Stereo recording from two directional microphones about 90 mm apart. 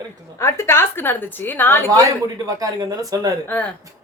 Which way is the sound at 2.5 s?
40° right (ahead or behind).